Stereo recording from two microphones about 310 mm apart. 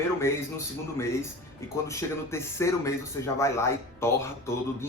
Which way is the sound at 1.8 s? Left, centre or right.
Centre.